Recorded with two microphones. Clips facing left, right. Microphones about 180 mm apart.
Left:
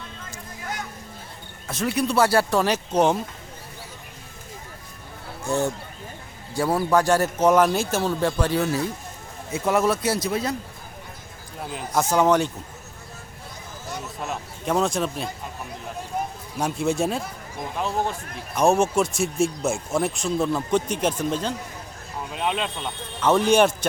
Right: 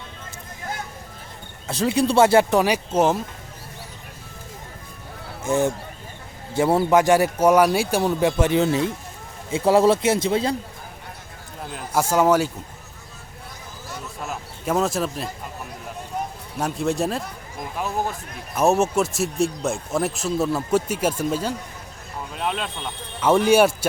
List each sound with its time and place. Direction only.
1.6 s speech: 25° right (ahead or behind); by 3.2 s 5° right (ahead or behind)
5.5 s speech: 15° right (ahead or behind)
11.9 s speech: 10° right (ahead or behind)
14.3 s speech: 5° right (ahead or behind)
16.6 s speech: centre (ahead or behind)